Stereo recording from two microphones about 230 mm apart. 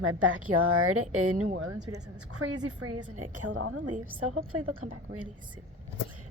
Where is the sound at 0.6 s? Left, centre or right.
Right.